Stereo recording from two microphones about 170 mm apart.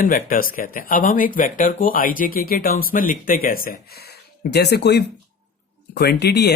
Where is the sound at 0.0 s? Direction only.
55° left (ahead or behind).